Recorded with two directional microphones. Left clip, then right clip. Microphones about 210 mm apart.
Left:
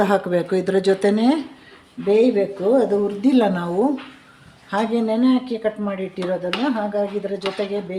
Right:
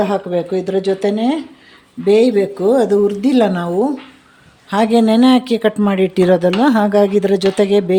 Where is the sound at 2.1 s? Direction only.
35° right (ahead or behind).